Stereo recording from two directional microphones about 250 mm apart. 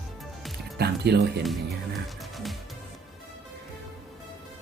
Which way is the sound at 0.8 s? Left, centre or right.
Right.